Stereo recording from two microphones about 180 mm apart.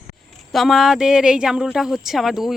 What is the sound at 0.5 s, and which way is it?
Speech, centre (ahead or behind).